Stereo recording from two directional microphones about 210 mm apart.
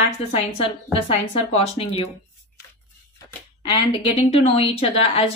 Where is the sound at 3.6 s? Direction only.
25° left (ahead or behind).